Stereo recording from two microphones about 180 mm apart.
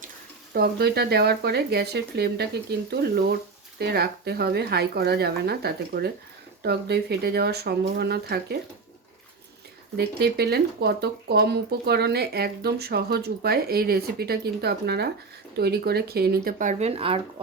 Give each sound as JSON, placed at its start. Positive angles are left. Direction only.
{"t": 0.5, "sound": "speech", "side_deg": -60}
{"t": 10.0, "sound": "speech", "side_deg": -60}